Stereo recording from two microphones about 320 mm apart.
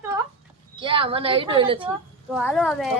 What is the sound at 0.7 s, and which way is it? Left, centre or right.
Speech, centre.